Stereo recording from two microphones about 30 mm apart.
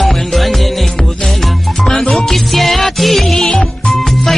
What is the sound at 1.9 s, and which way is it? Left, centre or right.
Music, centre.